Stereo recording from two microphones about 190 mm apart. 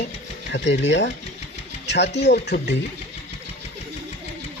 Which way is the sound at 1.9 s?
65° left (ahead or behind).